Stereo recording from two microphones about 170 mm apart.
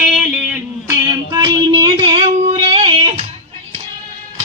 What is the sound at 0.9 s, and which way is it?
Music, 15° right (ahead or behind).